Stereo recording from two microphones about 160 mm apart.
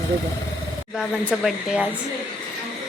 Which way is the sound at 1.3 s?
5° right (ahead or behind).